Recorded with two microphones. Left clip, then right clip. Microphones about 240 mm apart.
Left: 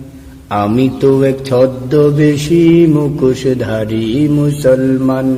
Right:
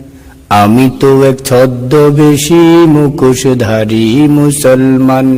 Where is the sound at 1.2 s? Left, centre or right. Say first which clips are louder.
Right 4 dB; right.